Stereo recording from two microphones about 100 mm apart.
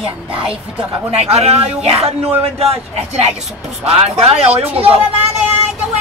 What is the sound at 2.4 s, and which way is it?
Speech, 80° right.